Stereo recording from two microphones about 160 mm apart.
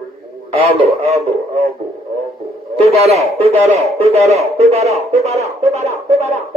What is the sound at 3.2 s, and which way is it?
Speech, 40° right (ahead or behind).